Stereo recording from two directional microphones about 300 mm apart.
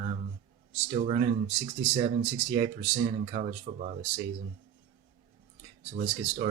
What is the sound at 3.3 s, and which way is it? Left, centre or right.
Speech, right.